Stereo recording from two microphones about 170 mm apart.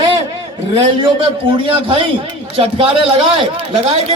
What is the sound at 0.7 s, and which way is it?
Speech, 30° right (ahead or behind).